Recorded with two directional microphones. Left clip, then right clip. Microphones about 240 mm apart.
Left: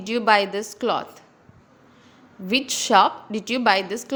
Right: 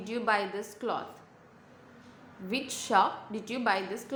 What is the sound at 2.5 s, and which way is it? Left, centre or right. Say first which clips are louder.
A woman's voice: left 10 dB; left.